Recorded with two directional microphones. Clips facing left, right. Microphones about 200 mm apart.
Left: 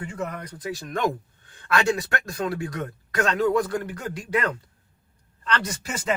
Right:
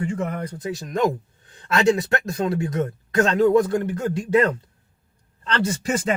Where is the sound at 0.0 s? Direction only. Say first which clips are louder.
Right 6 dB; 30° right (ahead or behind).